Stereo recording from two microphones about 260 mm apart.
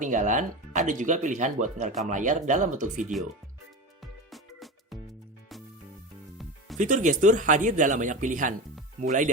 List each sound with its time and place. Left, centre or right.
0.0 s speech: right
4.0 s music: centre
6.7 s speech: right